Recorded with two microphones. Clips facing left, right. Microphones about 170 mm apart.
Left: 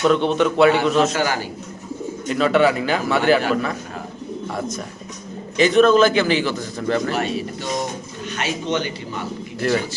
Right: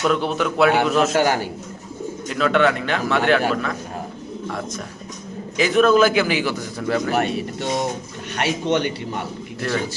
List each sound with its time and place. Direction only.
0.0 s a man's voice: 5° right (ahead or behind)
1.1 s speech: 55° right (ahead or behind)
2.3 s a man's voice: centre (ahead or behind)
5.5 s a man's voice: 5° right (ahead or behind)
7.1 s speech: 60° right (ahead or behind)